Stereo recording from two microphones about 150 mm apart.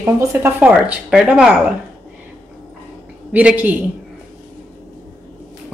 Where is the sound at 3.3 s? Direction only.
10° right (ahead or behind).